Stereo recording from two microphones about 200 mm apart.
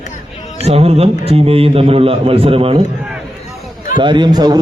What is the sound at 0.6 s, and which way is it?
A man's voice, 30° right (ahead or behind).